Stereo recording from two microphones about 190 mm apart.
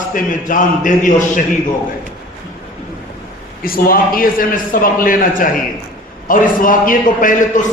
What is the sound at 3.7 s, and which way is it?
A man's voice, 50° left (ahead or behind).